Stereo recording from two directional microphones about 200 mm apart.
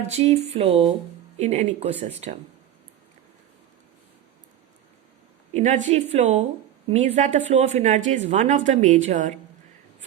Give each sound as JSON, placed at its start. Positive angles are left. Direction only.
{"t": 0.1, "sound": "a woman's voice", "side_deg": -30}
{"t": 5.5, "sound": "a woman's voice", "side_deg": -35}